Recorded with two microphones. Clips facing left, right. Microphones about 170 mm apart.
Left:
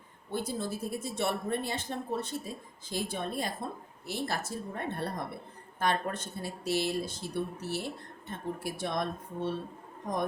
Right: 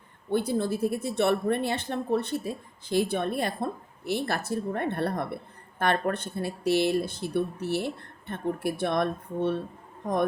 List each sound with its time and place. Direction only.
0.3 s a woman's voice: 65° right (ahead or behind)